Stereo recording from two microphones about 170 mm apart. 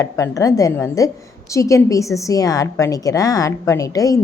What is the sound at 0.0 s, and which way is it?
A woman's voice, 20° left (ahead or behind).